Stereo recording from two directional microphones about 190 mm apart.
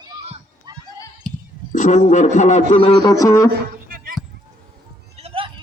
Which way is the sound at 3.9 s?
50° right (ahead or behind).